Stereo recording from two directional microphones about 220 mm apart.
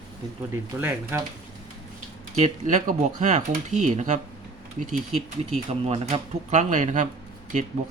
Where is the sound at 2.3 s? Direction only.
30° right (ahead or behind).